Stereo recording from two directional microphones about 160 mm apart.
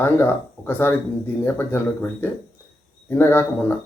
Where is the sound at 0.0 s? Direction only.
15° left (ahead or behind).